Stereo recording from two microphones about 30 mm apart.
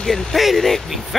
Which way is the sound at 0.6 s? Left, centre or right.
Centre.